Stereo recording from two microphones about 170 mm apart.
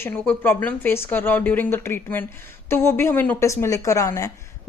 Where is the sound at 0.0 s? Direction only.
10° left (ahead or behind).